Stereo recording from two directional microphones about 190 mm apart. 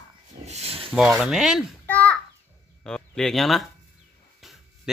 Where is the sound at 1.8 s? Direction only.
10° left (ahead or behind).